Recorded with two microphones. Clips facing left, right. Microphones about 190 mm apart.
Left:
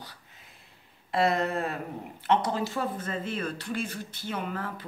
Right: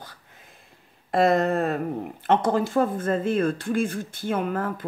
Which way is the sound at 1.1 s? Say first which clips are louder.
Right 6 dB; 45° right (ahead or behind).